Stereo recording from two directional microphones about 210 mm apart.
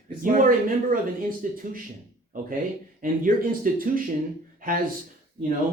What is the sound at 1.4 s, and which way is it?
Speech, 40° right (ahead or behind).